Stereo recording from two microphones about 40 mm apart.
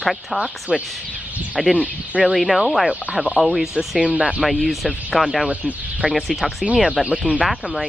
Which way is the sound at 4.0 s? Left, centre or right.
Right.